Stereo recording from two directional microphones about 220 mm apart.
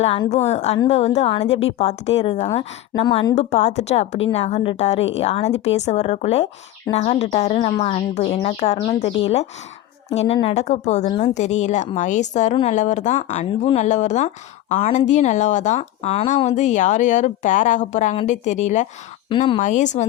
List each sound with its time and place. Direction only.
0.0 s a woman's voice: 25° left (ahead or behind)
19.6 s speech: 35° left (ahead or behind)